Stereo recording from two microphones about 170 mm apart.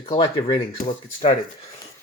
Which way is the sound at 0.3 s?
30° left (ahead or behind).